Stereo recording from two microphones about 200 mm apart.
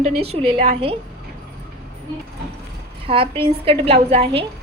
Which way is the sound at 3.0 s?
25° right (ahead or behind).